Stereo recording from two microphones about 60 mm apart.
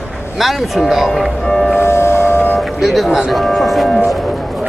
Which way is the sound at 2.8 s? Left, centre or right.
Centre.